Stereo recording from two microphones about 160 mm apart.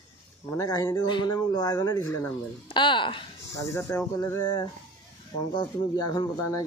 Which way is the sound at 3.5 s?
20° left (ahead or behind).